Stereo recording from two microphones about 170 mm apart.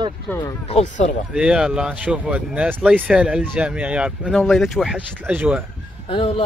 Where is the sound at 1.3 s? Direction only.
5° right (ahead or behind).